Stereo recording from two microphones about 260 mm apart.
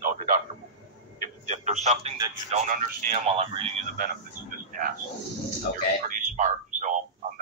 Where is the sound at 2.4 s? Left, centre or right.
Right.